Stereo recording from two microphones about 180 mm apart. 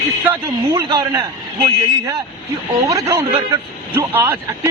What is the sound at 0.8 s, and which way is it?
Speech, 20° right (ahead or behind).